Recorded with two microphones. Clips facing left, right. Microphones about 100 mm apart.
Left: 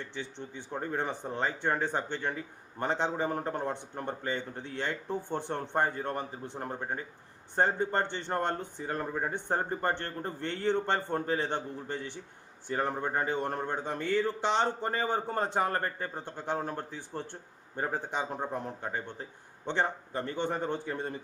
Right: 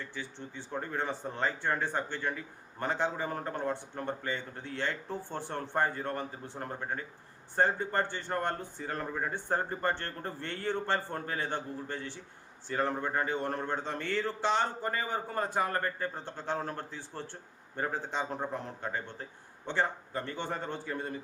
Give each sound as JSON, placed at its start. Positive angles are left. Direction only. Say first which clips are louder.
{"t": 0.0, "sound": "speech", "louder": "left 2 dB", "side_deg": 20}
{"t": 16.1, "sound": "a man's voice", "louder": "left 1 dB", "side_deg": 15}